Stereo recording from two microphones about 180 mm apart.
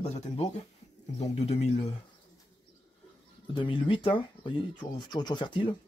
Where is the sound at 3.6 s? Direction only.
30° left (ahead or behind).